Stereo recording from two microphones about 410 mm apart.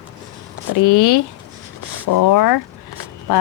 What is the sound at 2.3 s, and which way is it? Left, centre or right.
Speech, left.